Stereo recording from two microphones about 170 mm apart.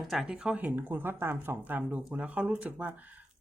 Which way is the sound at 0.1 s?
5° right (ahead or behind).